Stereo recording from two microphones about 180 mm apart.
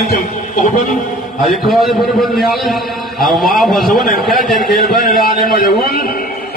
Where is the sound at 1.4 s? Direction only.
Centre (ahead or behind).